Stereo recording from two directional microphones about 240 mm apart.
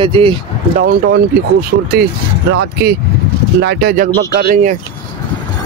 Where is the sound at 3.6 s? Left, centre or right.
Right.